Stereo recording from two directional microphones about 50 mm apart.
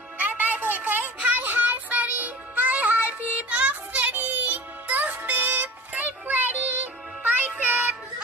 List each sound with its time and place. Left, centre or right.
0.2 s music: right